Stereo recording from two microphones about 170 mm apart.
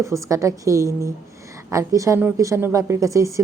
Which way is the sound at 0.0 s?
20° right (ahead or behind).